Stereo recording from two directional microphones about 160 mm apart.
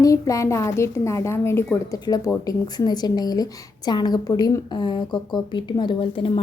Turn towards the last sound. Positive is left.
turn(degrees=35)  # may be behind; listen again after turning